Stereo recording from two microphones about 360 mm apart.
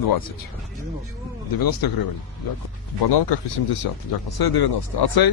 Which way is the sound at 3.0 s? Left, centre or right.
Left.